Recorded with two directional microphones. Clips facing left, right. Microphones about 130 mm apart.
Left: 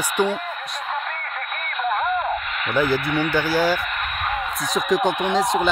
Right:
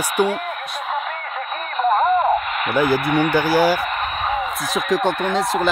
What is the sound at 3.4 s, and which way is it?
Speech, 15° right (ahead or behind).